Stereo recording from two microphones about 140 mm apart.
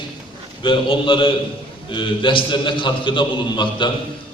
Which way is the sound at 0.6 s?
35° left (ahead or behind).